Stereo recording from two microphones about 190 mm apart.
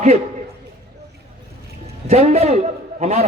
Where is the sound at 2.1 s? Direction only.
35° right (ahead or behind).